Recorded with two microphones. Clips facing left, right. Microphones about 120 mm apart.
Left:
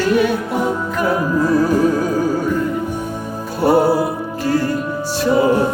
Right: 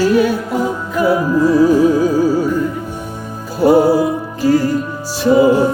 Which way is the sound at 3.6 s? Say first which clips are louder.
Right 3 dB; centre (ahead or behind).